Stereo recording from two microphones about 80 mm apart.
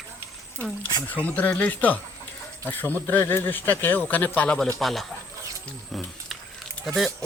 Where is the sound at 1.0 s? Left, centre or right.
Centre.